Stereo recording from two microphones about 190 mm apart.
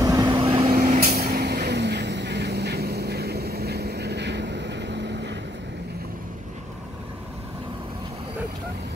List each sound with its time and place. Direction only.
0.0 s vehicle: 20° right (ahead or behind)
0.7 s vehicle: 40° right (ahead or behind); by 5.4 s 65° right (ahead or behind)